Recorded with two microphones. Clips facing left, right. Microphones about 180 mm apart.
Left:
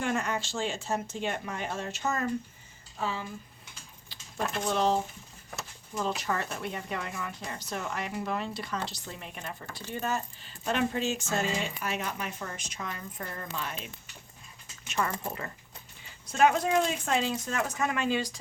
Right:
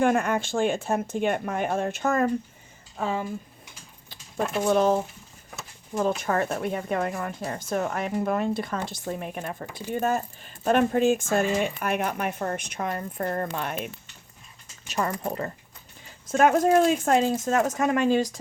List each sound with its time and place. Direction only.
0.0 s speech: 55° right (ahead or behind)
4.6 s speech: 50° right (ahead or behind)
6.0 s speech: 50° right (ahead or behind)
14.8 s speech: 35° right (ahead or behind)